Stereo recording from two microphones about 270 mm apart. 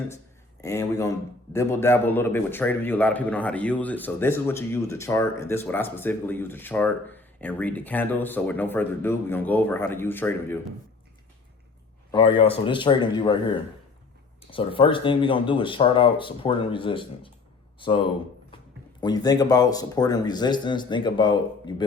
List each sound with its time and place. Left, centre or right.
0.6 s a man's voice: centre
12.1 s a man's voice: centre